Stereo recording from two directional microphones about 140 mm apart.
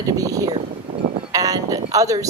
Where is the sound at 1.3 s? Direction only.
25° right (ahead or behind).